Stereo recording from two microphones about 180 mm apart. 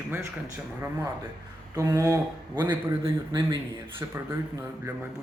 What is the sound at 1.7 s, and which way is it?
Speech, 20° right (ahead or behind).